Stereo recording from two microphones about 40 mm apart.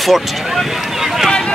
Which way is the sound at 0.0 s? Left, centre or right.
Centre.